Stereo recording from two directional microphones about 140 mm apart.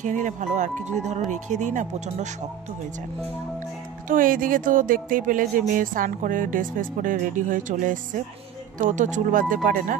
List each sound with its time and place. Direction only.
0.0 s speech: 60° right (ahead or behind)
4.1 s speech: 80° right